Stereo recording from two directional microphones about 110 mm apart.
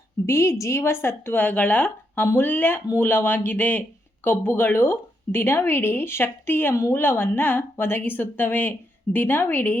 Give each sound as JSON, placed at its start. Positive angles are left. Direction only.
{"t": 0.3, "sound": "a woman's voice", "side_deg": 25}